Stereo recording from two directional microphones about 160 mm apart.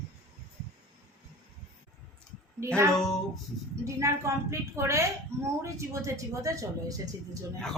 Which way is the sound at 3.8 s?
20° right (ahead or behind).